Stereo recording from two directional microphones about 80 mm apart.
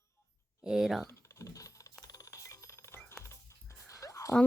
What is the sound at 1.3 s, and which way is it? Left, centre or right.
Typing, left.